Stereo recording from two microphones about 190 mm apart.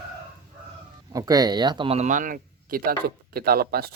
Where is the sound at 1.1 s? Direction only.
20° right (ahead or behind); by 3.9 s 55° right (ahead or behind).